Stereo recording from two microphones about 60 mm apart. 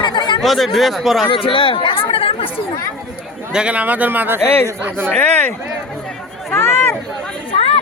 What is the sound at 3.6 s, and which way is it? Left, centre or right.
Speech, right.